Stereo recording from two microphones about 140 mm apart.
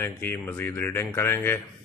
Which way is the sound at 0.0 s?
15° left (ahead or behind).